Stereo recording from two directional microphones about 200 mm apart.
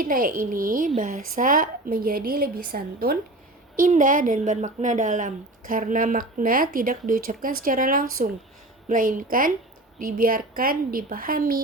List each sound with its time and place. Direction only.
0.0 s speech: 45° right (ahead or behind)